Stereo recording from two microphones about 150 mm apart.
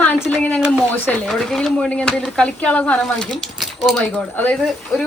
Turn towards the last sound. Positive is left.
turn(degrees=10)  # may be behind; listen again after turning